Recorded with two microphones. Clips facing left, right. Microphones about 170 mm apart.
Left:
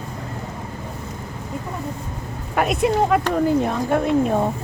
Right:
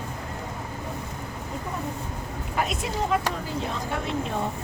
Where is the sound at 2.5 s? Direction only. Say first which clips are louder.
Left 10 dB; 60° left (ahead or behind).